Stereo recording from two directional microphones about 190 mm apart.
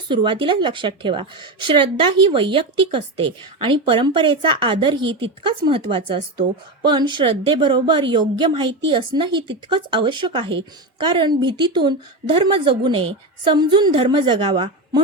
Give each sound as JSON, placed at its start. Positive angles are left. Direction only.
{"t": 0.1, "sound": "speech", "side_deg": -25}